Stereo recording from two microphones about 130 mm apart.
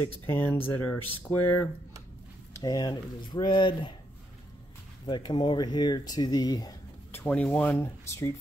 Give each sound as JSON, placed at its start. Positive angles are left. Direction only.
{"t": 0.0, "sound": "speech", "side_deg": 15}
{"t": 2.5, "sound": "speech", "side_deg": 30}
{"t": 5.0, "sound": "speech", "side_deg": 35}
{"t": 7.1, "sound": "speech", "side_deg": 15}